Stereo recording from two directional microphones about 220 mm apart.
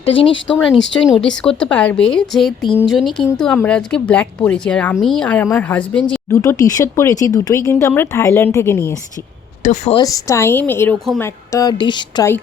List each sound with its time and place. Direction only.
0.0 s speech: 25° left (ahead or behind)
0.9 s a woman's voice: 5° left (ahead or behind)
9.6 s a woman's voice: 30° left (ahead or behind)
10.0 s speech: 15° left (ahead or behind)
11.2 s speech: 15° left (ahead or behind)